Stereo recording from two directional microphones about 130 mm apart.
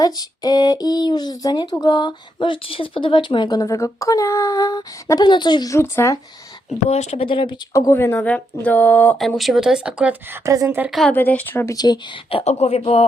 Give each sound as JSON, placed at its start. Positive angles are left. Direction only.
{"t": 0.0, "sound": "speech", "side_deg": 30}
{"t": 5.7, "sound": "speech", "side_deg": 20}
{"t": 6.8, "sound": "speech", "side_deg": 60}
{"t": 7.3, "sound": "speech", "side_deg": 40}
{"t": 7.7, "sound": "speech", "side_deg": 25}
{"t": 9.4, "sound": "speech", "side_deg": 0}
{"t": 10.4, "sound": "speech", "side_deg": -25}
{"t": 11.1, "sound": "speech", "side_deg": 15}
{"t": 11.7, "sound": "speech", "side_deg": 30}
{"t": 12.5, "sound": "speech", "side_deg": 55}